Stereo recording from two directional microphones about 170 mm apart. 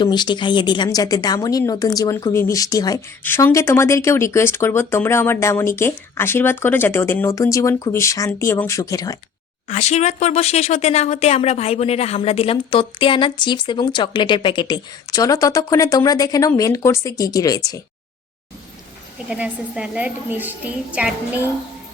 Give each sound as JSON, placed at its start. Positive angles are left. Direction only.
{"t": 0.0, "sound": "a woman's voice", "side_deg": 25}
{"t": 9.6, "sound": "a woman's voice", "side_deg": 40}
{"t": 19.3, "sound": "a woman's voice", "side_deg": -5}